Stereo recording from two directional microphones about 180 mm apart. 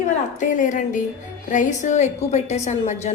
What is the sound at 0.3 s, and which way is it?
A woman's voice, 45° left (ahead or behind).